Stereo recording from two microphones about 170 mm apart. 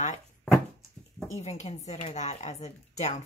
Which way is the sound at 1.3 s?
40° left (ahead or behind).